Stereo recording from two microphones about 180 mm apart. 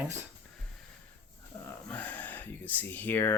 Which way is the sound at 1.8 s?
10° left (ahead or behind).